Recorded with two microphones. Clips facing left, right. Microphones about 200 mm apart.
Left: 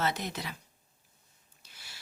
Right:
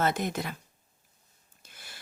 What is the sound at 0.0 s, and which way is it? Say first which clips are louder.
Speech: right 5 dB; 50° right (ahead or behind).